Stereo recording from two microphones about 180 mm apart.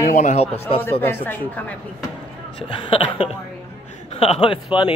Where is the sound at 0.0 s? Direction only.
45° left (ahead or behind).